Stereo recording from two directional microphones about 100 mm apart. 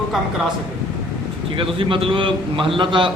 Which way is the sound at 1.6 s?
60° right (ahead or behind).